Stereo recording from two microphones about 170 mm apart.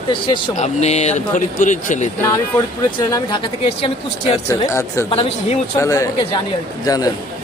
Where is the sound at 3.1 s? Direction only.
20° left (ahead or behind).